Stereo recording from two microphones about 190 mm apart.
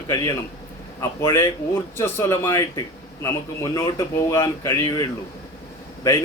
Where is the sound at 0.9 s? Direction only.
15° left (ahead or behind).